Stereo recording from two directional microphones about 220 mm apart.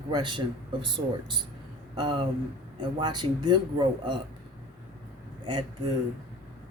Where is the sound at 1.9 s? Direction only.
20° right (ahead or behind).